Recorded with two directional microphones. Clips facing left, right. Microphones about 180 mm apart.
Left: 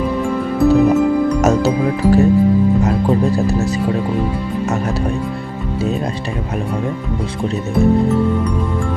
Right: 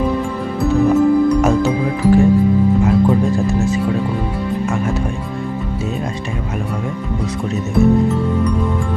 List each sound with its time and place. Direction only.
1.4 s music: 45° left (ahead or behind)